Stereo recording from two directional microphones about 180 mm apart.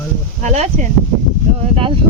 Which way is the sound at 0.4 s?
40° right (ahead or behind).